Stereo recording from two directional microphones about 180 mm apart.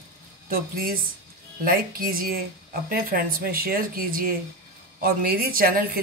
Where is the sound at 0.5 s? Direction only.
55° right (ahead or behind).